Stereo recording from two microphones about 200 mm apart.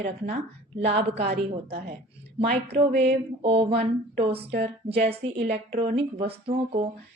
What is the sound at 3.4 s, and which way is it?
Speech, 30° right (ahead or behind).